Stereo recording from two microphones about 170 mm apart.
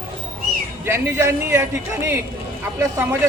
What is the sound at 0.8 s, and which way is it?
Speech, 15° right (ahead or behind).